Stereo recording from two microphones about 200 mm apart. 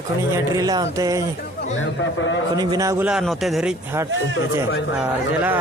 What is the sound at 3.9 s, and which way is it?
Speech, 15° right (ahead or behind).